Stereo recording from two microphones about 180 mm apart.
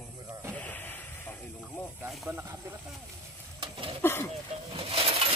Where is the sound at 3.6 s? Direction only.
30° right (ahead or behind).